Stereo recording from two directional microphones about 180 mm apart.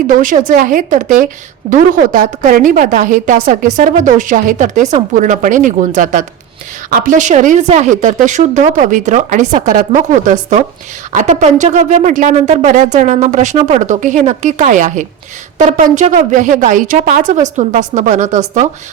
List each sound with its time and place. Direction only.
0.1 s a woman's voice: 45° right (ahead or behind)